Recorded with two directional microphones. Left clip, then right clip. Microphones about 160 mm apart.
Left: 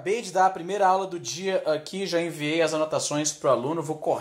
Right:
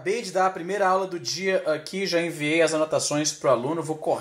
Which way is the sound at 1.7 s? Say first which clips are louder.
Right 1 dB; 25° left (ahead or behind).